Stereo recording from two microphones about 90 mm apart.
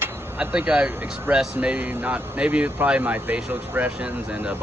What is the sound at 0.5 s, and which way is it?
Speech, 15° right (ahead or behind).